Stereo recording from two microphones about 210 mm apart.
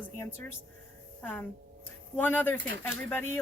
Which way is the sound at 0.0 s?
10° left (ahead or behind).